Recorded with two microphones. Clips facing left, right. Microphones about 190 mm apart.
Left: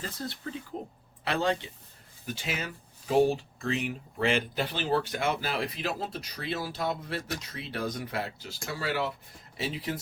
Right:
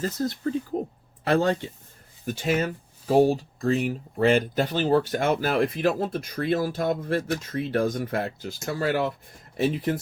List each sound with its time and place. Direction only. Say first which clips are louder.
0.0 s speech: right 10 dB; 45° right (ahead or behind)